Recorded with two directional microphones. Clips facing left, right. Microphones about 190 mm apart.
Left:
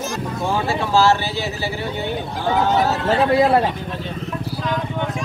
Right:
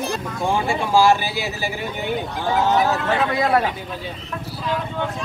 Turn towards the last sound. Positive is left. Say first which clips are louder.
# left 4 dB
turn(degrees=30)  # may be behind; listen again after turning